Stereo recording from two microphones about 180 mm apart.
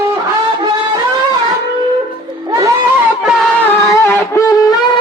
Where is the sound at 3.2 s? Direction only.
Centre (ahead or behind).